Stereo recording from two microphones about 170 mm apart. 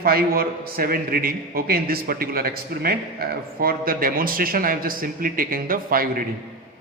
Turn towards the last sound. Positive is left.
turn(degrees=-60)  # may be behind; listen again after turning